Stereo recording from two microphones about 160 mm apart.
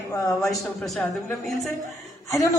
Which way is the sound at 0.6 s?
Centre (ahead or behind).